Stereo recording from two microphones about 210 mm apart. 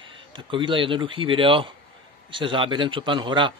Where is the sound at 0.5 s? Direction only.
25° right (ahead or behind).